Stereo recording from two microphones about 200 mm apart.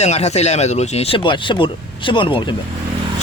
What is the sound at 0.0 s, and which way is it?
Speech, 35° left (ahead or behind).